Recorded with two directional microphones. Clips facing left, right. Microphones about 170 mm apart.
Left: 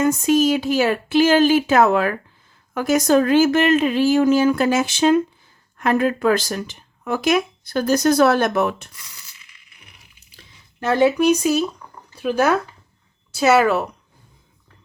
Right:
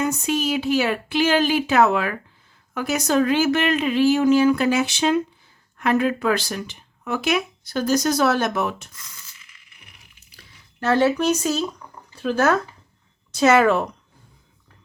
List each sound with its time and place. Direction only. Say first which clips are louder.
0.0 s speech: left 6 dB; 45° left (ahead or behind); by 8.9 s 60° left (ahead or behind)
10.3 s speech: left 1 dB; 15° left (ahead or behind)